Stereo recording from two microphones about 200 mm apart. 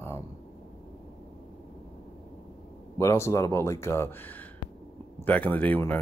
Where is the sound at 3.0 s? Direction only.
15° left (ahead or behind).